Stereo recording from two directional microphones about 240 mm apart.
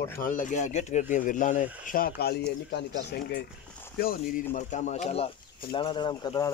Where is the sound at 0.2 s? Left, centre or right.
Left.